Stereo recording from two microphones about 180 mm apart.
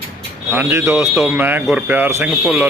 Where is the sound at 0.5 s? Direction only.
10° right (ahead or behind).